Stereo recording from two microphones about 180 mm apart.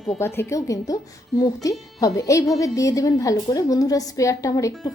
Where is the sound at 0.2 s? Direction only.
15° left (ahead or behind).